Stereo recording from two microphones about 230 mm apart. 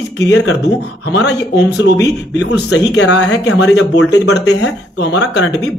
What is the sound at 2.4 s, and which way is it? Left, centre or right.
Speech, left.